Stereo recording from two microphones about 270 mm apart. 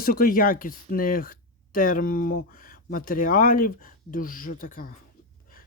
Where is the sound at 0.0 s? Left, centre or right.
Left.